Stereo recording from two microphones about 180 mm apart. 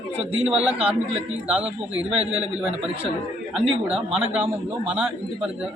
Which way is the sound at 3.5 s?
5° right (ahead or behind).